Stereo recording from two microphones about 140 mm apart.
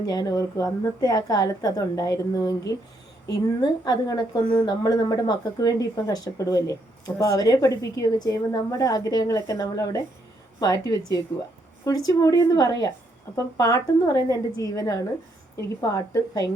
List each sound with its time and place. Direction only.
0.0 s speech: 25° left (ahead or behind)